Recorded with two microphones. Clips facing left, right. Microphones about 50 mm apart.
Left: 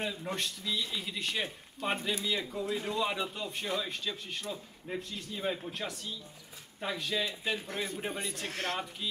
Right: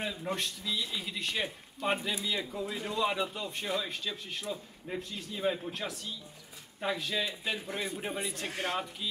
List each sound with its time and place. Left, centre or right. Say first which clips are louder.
0.0 s a man's voice: right 1 dB; centre
8.5 s speech: even; centre